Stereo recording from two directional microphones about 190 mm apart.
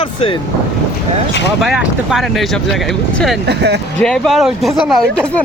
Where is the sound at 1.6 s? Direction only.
5° right (ahead or behind).